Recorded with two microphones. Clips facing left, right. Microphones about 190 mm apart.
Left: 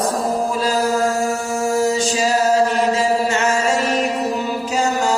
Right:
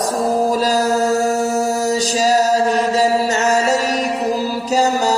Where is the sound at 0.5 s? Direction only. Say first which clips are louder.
Right 2 dB; 40° right (ahead or behind).